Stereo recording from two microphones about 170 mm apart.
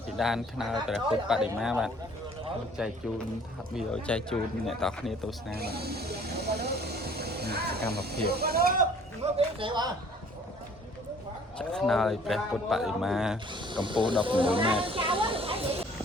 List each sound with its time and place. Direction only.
0.2 s speech: centre (ahead or behind)
3.8 s speech: 5° left (ahead or behind)
5.5 s snake: 65° right (ahead or behind)
8.3 s speech: 65° right (ahead or behind)
9.2 s a sound: 30° right (ahead or behind)
11.5 s speech: 5° left (ahead or behind)
13.5 s speech: 30° right (ahead or behind)
14.8 s a sound: 30° right (ahead or behind)